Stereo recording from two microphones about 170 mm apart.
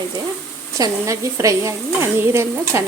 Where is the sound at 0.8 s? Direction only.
20° right (ahead or behind).